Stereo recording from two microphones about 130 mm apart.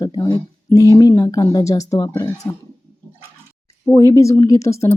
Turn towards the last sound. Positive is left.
turn(degrees=25)  # may be behind; listen again after turning